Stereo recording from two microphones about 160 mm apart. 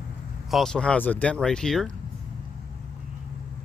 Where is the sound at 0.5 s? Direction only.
Centre (ahead or behind).